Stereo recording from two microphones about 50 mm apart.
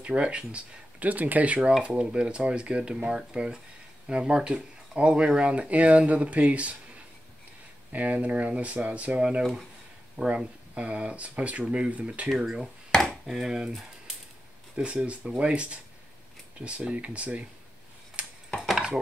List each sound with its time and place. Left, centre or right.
0.0 s speech: right
7.9 s speech: right
9.4 s speech: centre
10.1 s speech: right
12.3 s speech: centre
14.8 s speech: right
18.2 s a sound: right
18.6 s a sound: centre